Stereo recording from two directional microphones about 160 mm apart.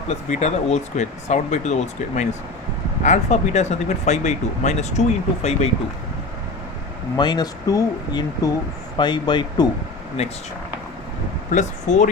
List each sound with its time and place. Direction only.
0.1 s speech: 45° left (ahead or behind)
7.2 s speech: 25° left (ahead or behind)
10.2 s speech: 40° left (ahead or behind)
11.5 s speech: 50° left (ahead or behind)